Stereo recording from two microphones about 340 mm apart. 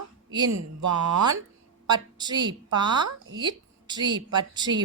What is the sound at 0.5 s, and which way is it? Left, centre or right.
Speech, right.